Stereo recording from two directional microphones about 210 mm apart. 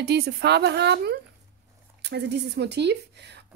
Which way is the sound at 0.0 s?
50° right (ahead or behind).